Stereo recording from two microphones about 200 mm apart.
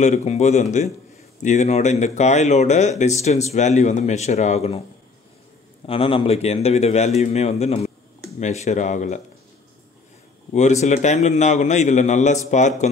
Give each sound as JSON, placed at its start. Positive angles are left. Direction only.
{"t": 0.0, "sound": "speech", "side_deg": 35}
{"t": 5.9, "sound": "speech", "side_deg": 25}
{"t": 10.5, "sound": "speech", "side_deg": 35}